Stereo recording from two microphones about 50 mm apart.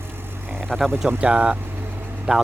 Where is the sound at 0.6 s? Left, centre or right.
Centre.